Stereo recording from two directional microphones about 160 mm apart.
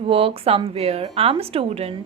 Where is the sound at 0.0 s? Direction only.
35° right (ahead or behind).